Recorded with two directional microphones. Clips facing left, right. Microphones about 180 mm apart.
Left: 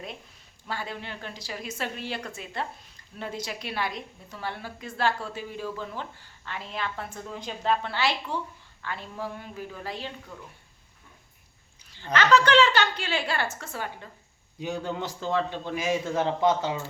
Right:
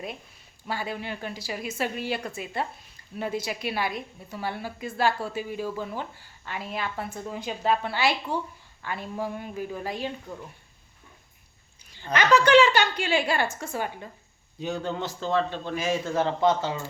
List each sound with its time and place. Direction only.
0.7 s a woman's voice: 10° right (ahead or behind)
12.1 s a woman's voice: 10° right (ahead or behind)
14.6 s a man's voice: 10° left (ahead or behind)